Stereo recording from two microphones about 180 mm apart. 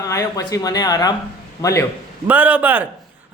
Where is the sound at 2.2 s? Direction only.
10° right (ahead or behind).